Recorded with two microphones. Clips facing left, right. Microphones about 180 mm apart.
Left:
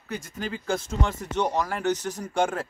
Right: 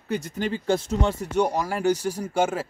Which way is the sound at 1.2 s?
10° right (ahead or behind).